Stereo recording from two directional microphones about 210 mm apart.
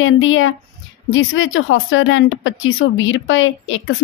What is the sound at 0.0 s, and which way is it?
Speech, 70° left (ahead or behind).